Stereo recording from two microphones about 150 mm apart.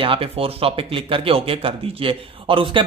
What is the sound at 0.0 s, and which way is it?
Speech, 40° right (ahead or behind).